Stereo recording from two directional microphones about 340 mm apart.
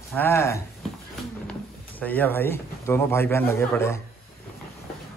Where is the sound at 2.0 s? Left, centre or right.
Centre.